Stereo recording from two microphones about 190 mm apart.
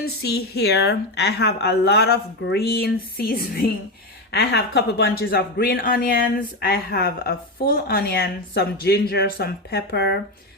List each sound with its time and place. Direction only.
0.0 s speech: 55° left (ahead or behind)